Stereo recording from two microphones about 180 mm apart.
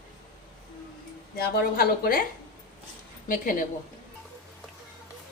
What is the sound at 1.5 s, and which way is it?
Speech, 55° left (ahead or behind).